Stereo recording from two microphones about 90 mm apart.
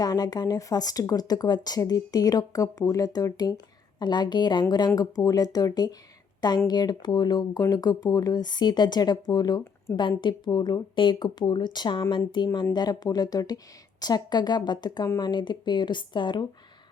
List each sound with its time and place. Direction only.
0.0 s speech: 45° left (ahead or behind)
4.9 s speech: 45° left (ahead or behind)